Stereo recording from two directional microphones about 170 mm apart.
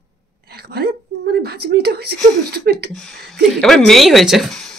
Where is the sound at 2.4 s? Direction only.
70° right (ahead or behind).